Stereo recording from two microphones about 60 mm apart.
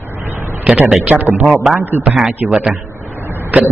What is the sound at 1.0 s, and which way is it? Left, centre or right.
Speech, right.